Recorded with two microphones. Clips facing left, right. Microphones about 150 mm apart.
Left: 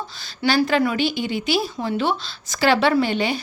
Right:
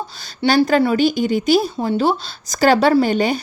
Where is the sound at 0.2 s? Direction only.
40° right (ahead or behind).